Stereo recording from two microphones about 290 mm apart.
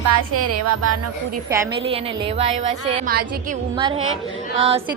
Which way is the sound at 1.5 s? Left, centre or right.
Centre.